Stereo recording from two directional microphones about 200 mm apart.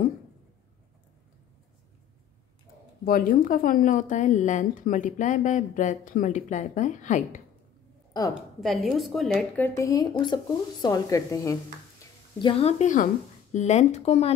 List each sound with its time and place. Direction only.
3.1 s a woman's voice: 45° left (ahead or behind)
8.4 s speech: centre (ahead or behind)
9.8 s a woman's voice: 20° left (ahead or behind)
12.4 s a woman's voice: 25° left (ahead or behind)